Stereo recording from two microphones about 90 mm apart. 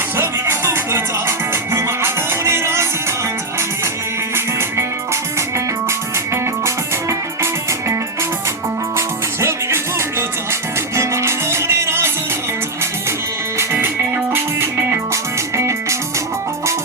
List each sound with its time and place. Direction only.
0.2 s music: 25° right (ahead or behind)
4.4 s music: 25° right (ahead or behind)
6.3 s music: 30° right (ahead or behind)
9.0 s music: 30° right (ahead or behind)
13.6 s music: 25° right (ahead or behind)